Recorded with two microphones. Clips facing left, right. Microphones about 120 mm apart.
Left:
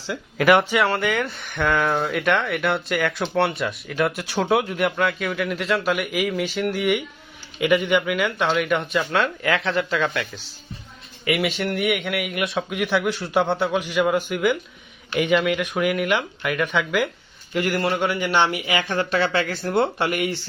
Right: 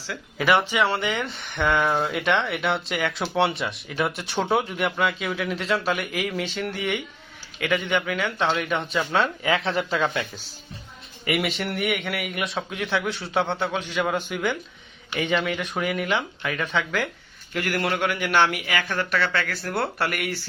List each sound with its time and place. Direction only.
0.4 s speech: 15° left (ahead or behind)
0.8 s speech: centre (ahead or behind)
9.6 s speech: 35° right (ahead or behind)
11.3 s speech: centre (ahead or behind)
18.8 s speech: 30° left (ahead or behind)